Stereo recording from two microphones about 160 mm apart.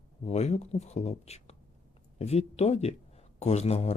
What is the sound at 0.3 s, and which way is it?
Speech, 45° left (ahead or behind).